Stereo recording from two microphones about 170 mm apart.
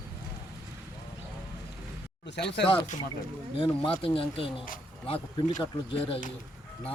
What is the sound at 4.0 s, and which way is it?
Speech, 30° left (ahead or behind).